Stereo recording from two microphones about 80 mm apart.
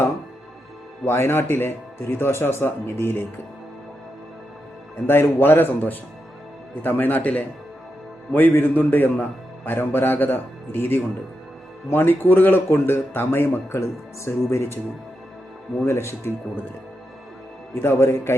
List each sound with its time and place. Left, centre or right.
1.0 s speech: left
5.0 s speech: left
15.8 s speech: left
17.7 s speech: left